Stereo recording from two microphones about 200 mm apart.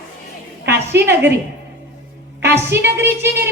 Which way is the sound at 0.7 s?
10° right (ahead or behind).